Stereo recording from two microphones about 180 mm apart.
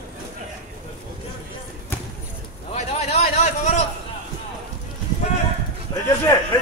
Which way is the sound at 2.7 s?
40° left (ahead or behind).